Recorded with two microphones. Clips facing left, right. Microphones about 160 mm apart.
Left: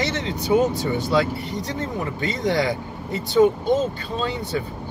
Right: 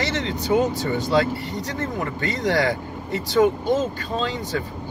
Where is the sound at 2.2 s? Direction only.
20° left (ahead or behind).